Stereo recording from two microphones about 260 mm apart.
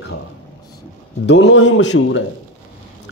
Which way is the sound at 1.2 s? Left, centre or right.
Left.